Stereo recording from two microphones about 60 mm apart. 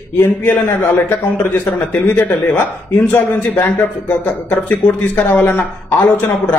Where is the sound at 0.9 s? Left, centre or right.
Left.